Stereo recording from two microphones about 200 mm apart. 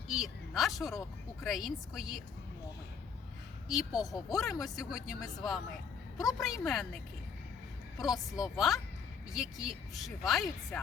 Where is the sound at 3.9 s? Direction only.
20° left (ahead or behind).